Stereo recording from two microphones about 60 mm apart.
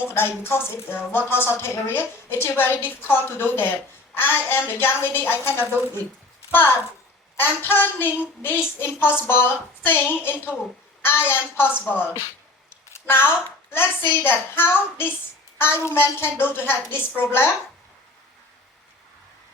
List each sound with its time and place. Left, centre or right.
0.0 s a woman's voice: left
7.3 s a woman's voice: left
12.7 s a woman's voice: left